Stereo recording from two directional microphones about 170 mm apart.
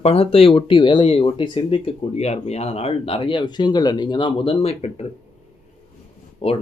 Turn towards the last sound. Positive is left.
turn(degrees=35)  # may be behind; listen again after turning